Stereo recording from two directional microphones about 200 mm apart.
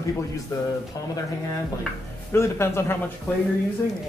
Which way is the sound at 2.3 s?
15° left (ahead or behind).